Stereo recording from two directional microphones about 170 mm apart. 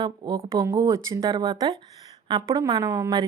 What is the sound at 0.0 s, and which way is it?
A woman's voice, 25° right (ahead or behind).